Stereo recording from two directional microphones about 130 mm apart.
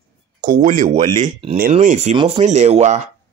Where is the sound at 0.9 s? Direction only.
65° right (ahead or behind).